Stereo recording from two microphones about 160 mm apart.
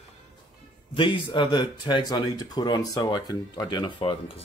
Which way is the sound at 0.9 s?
30° left (ahead or behind).